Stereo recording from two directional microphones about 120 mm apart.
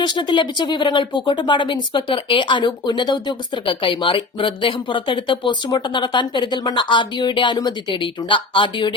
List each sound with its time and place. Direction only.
0.0 s speech: 40° left (ahead or behind)